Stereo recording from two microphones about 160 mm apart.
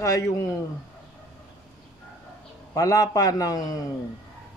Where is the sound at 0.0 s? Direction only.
20° left (ahead or behind).